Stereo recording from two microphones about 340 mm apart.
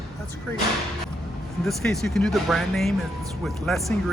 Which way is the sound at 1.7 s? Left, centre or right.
Centre.